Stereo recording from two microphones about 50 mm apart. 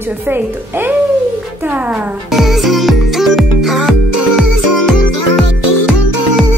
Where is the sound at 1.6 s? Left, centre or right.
Right.